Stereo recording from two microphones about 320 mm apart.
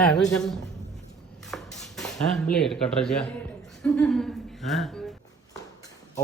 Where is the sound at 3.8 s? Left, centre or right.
Centre.